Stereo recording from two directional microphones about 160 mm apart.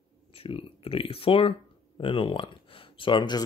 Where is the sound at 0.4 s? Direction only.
35° left (ahead or behind).